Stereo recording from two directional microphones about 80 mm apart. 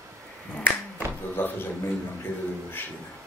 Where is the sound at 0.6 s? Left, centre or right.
Left.